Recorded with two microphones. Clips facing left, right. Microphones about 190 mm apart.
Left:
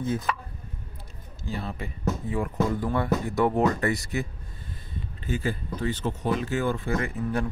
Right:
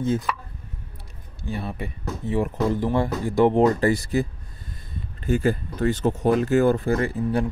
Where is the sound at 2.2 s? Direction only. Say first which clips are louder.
Right 6 dB; 25° right (ahead or behind).